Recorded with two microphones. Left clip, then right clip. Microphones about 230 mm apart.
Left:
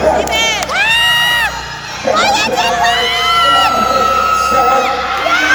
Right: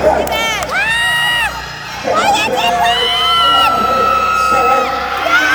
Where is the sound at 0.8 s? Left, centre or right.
Centre.